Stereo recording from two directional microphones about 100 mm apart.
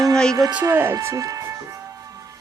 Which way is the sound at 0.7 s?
25° right (ahead or behind).